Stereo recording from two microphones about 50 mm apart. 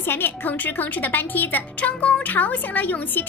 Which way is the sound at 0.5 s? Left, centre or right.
Left.